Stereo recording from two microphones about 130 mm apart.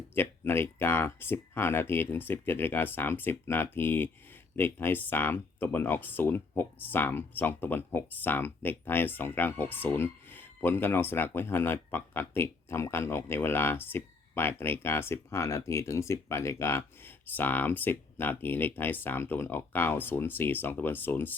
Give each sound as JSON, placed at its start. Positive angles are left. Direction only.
{"t": 0.1, "sound": "speech", "side_deg": 15}